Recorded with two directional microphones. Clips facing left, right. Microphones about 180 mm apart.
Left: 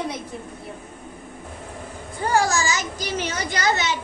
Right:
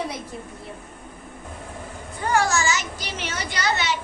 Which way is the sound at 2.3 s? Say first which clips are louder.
Left 1 dB; 35° left (ahead or behind).